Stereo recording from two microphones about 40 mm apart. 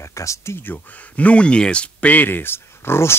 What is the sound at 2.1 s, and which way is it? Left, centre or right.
Speech, left.